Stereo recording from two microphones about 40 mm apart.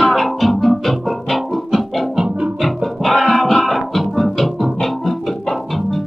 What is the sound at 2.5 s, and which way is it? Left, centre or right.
Music, centre.